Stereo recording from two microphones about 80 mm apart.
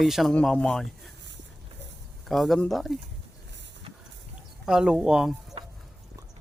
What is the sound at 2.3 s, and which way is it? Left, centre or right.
Speech, centre.